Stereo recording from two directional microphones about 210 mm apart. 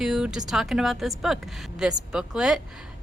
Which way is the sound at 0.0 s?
Centre (ahead or behind).